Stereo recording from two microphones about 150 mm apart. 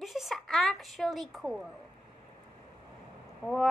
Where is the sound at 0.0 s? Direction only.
Centre (ahead or behind).